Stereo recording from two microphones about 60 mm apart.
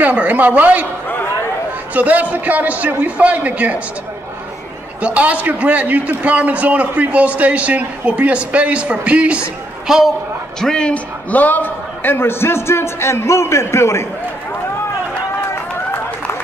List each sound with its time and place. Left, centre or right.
0.0 s a man's voice: right
2.0 s a man's voice: right
5.0 s a man's voice: right
9.8 s a woman's voice: centre
10.6 s a man's voice: centre
11.2 s a man's voice: left